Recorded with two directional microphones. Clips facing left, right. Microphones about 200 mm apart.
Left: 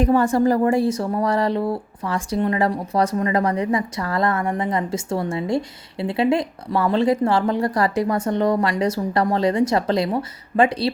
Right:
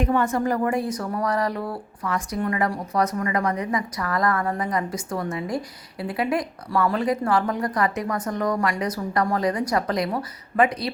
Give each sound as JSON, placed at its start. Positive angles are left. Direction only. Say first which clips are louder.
{"t": 0.0, "sound": "speech", "louder": "left 5 dB", "side_deg": 35}